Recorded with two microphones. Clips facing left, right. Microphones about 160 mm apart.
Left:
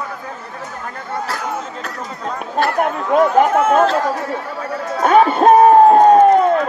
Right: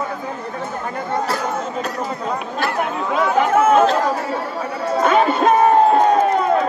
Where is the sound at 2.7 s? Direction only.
50° left (ahead or behind).